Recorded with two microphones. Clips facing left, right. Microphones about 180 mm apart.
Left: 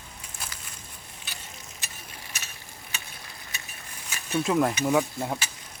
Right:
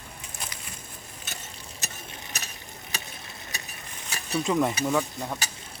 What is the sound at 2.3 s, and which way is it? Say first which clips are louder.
Tick-tock: right 3 dB; 35° right (ahead or behind).